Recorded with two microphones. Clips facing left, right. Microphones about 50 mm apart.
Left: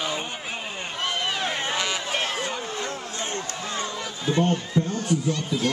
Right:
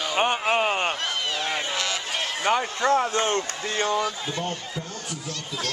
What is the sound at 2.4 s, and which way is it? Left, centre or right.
Speech, right.